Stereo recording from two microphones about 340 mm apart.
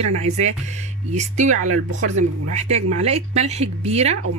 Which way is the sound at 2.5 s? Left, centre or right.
Centre.